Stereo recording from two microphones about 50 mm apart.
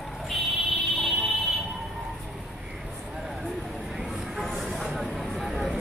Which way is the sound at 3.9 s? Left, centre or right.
Centre.